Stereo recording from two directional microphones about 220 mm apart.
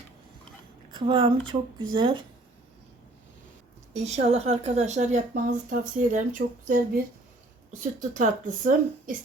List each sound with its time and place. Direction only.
0.9 s speech: 20° right (ahead or behind)
3.9 s a woman's voice: 30° right (ahead or behind)